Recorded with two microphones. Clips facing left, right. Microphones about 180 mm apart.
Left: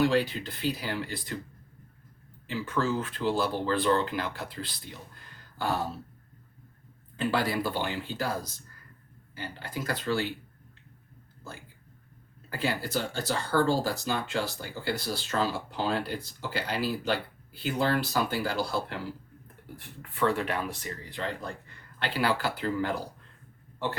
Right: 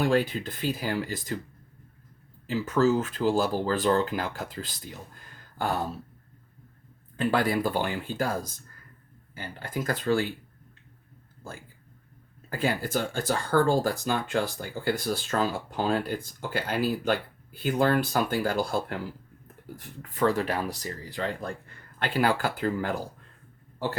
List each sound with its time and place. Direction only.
0.0 s speech: 50° right (ahead or behind)
2.5 s speech: 40° right (ahead or behind)
5.3 s a sound: 50° right (ahead or behind)
7.3 s speech: 50° right (ahead or behind)
12.5 s speech: 50° right (ahead or behind)
19.7 s speech: 40° right (ahead or behind)